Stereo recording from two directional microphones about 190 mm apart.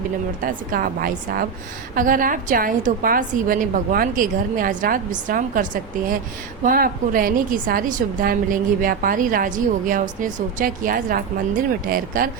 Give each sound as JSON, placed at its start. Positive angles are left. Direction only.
{"t": 0.4, "sound": "a woman's voice", "side_deg": -50}